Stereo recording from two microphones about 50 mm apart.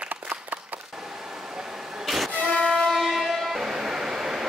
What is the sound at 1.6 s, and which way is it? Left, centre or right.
Vehicle, centre.